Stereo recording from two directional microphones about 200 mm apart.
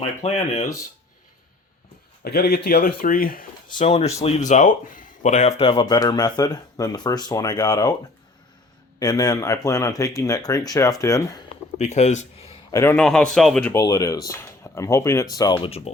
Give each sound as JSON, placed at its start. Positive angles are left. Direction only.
{"t": 0.2, "sound": "speech", "side_deg": 30}
{"t": 2.2, "sound": "speech", "side_deg": 50}
{"t": 3.8, "sound": "speech", "side_deg": 30}
{"t": 9.0, "sound": "speech", "side_deg": 20}
{"t": 11.8, "sound": "speech", "side_deg": 35}
{"t": 12.7, "sound": "a man's voice", "side_deg": 10}